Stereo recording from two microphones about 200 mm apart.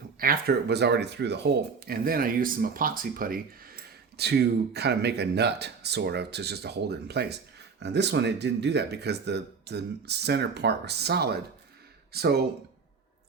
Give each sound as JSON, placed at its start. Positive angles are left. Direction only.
{"t": 0.2, "sound": "speech", "side_deg": -50}